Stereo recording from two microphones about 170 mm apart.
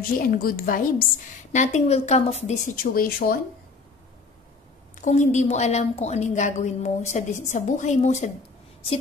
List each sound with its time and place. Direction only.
0.3 s a woman's voice: 60° left (ahead or behind)
1.5 s a woman's voice: 45° left (ahead or behind)
2.7 s a woman's voice: 60° left (ahead or behind)
5.0 s a woman's voice: 45° left (ahead or behind)